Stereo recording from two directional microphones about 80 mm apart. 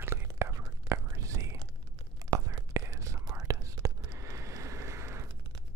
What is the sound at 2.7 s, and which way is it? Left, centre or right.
Whispering, right.